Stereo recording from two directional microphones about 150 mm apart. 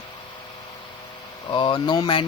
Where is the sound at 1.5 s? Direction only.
35° left (ahead or behind).